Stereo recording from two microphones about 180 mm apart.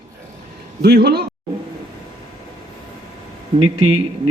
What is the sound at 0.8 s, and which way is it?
Speech, 65° right (ahead or behind).